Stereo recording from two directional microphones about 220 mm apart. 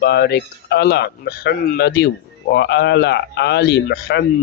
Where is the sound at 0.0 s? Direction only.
50° left (ahead or behind).